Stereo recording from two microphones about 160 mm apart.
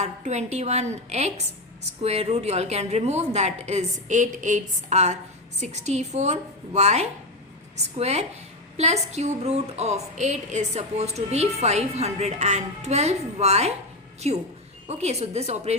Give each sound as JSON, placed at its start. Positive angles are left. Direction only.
{"t": 0.0, "sound": "a woman's voice", "side_deg": -45}